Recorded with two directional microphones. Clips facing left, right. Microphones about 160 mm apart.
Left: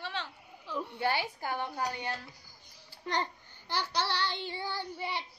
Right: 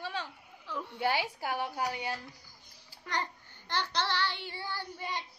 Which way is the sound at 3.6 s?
10° left (ahead or behind).